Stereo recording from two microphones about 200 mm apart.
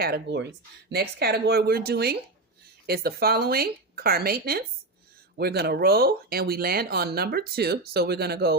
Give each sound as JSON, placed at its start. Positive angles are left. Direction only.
{"t": 0.0, "sound": "speech", "side_deg": -55}